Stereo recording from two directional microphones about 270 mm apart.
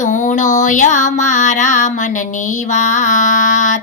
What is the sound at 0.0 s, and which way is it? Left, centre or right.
Music, left.